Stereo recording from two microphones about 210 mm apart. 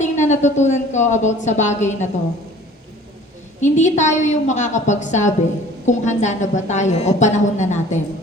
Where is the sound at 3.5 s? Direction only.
35° left (ahead or behind).